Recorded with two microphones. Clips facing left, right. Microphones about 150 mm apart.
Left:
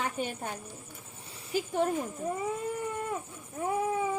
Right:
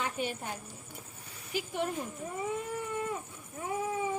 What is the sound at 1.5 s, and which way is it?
Speech, 40° left (ahead or behind).